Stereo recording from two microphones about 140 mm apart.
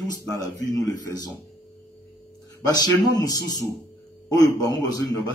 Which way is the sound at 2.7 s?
25° left (ahead or behind).